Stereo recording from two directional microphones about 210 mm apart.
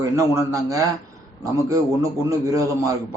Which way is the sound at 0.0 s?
15° right (ahead or behind).